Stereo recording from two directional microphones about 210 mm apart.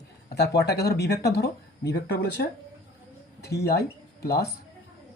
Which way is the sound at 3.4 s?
50° left (ahead or behind).